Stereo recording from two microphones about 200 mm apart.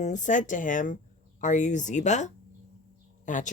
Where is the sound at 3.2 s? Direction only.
40° left (ahead or behind).